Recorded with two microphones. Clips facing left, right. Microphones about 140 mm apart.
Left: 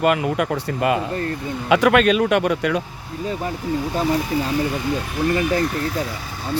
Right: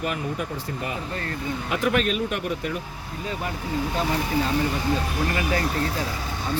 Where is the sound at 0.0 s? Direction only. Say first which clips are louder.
Left 9 dB; 85° left.